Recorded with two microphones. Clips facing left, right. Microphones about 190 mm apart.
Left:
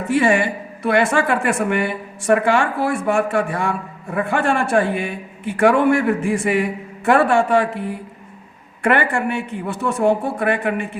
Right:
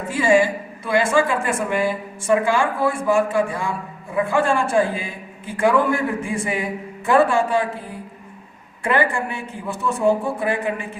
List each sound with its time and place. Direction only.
0.1 s a woman's voice: 65° left (ahead or behind)